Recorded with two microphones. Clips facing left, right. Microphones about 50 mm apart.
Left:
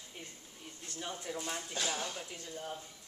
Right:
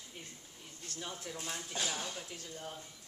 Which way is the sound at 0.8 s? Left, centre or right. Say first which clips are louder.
Left 2 dB; centre.